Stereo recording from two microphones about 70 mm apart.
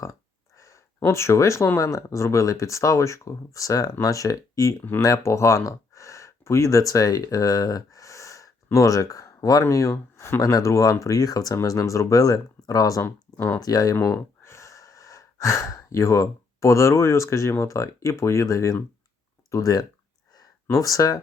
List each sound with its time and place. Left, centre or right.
0.6 s speech: left
10.4 s speech: left
13.9 s speech: left